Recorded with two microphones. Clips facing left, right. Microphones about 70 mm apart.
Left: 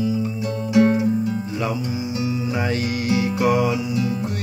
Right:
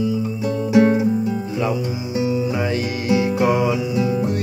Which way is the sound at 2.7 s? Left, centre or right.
Right.